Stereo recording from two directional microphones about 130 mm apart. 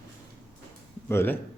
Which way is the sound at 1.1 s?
20° left (ahead or behind).